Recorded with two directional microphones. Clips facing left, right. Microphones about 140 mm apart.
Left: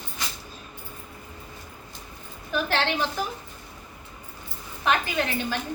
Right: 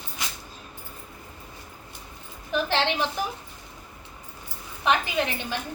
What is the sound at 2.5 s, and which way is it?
Speech, 25° right (ahead or behind).